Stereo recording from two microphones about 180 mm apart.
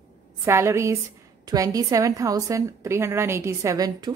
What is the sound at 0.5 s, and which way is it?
A woman's voice, 15° right (ahead or behind).